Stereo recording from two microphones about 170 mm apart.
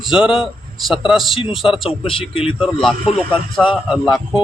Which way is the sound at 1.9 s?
35° left (ahead or behind).